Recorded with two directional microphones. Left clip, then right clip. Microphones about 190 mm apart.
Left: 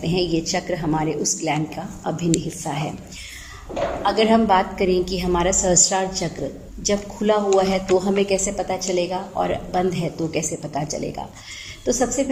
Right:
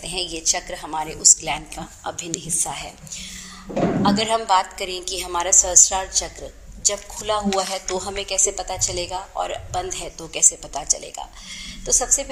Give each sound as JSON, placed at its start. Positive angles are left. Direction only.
{"t": 0.1, "sound": "a woman's voice", "side_deg": -35}
{"t": 4.2, "sound": "a woman's voice", "side_deg": -35}